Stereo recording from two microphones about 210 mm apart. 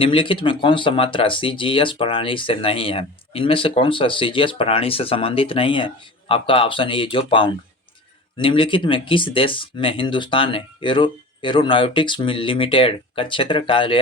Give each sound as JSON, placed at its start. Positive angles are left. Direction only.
{"t": 0.0, "sound": "speech", "side_deg": 25}